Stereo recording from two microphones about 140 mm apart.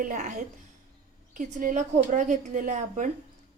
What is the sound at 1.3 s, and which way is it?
A woman's voice, 65° right (ahead or behind).